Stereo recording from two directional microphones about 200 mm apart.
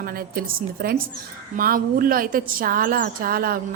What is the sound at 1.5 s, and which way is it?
A woman's voice, 45° right (ahead or behind).